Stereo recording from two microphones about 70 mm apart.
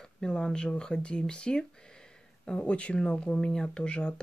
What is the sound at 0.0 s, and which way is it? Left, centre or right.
Speech, centre.